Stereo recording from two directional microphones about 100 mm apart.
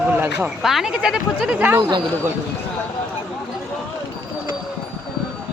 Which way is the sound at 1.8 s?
45° right (ahead or behind).